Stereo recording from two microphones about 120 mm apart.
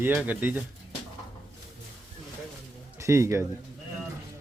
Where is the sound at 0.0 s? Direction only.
15° right (ahead or behind).